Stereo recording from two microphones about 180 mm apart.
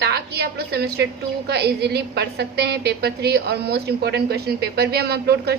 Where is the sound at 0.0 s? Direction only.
65° right (ahead or behind).